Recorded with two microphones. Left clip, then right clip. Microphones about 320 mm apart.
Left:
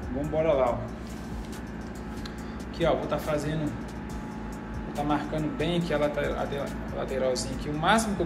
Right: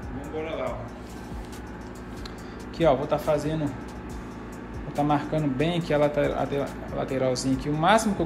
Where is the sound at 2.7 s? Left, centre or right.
Centre.